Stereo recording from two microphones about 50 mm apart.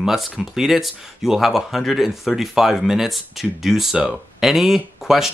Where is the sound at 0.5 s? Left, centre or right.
Centre.